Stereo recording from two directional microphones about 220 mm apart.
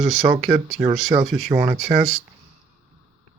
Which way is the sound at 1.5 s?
10° right (ahead or behind).